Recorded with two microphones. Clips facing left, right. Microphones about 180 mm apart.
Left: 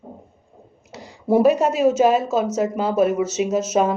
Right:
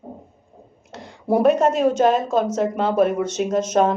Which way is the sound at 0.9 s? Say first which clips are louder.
Left 2 dB; 5° left (ahead or behind).